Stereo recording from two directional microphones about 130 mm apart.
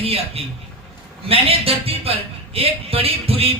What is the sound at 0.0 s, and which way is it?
A man's voice, 50° right (ahead or behind).